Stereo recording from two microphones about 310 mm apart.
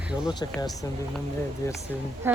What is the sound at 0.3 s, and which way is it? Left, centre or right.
Speech, centre.